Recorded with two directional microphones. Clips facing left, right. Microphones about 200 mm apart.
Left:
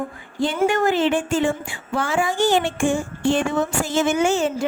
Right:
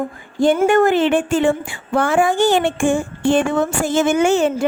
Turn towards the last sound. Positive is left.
turn(degrees=-60)  # may be behind; listen again after turning